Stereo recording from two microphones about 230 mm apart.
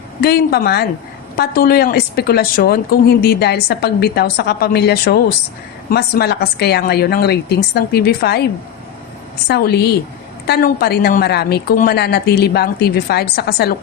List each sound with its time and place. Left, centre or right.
0.2 s a woman's voice: left
9.5 s a woman's voice: left